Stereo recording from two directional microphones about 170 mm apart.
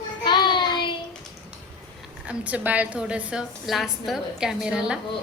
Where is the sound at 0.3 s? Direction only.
25° left (ahead or behind).